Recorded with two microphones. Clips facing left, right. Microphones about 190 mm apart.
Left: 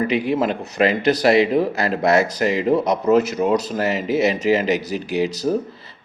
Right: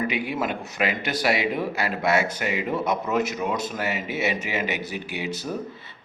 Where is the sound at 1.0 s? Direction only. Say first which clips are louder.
Left 10 dB; 40° left (ahead or behind).